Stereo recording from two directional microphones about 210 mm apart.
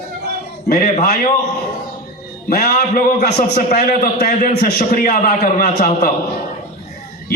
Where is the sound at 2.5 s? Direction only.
45° left (ahead or behind).